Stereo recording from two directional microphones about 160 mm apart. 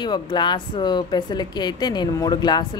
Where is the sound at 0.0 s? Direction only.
30° left (ahead or behind).